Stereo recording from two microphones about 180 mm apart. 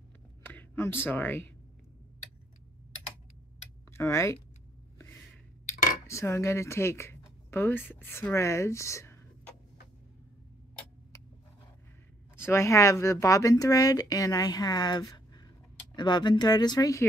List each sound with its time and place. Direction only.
0.4 s speech: 10° left (ahead or behind)
3.9 s speech: 15° left (ahead or behind)
6.0 s speech: 15° left (ahead or behind)
12.4 s speech: 15° left (ahead or behind)